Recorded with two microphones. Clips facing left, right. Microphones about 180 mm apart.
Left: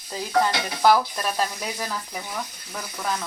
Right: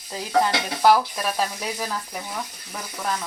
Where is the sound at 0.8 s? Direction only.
5° right (ahead or behind).